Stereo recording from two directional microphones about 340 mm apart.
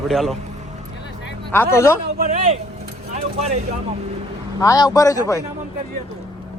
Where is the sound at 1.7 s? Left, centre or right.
Centre.